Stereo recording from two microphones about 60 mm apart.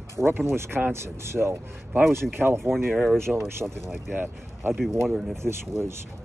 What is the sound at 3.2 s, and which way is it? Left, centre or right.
Speech, right.